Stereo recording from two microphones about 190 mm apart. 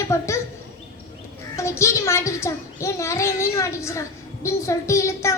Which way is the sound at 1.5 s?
15° left (ahead or behind).